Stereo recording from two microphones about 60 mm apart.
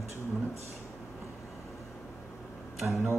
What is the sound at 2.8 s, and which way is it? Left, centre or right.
Speech, right.